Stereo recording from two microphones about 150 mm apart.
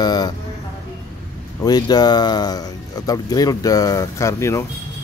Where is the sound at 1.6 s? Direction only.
25° left (ahead or behind).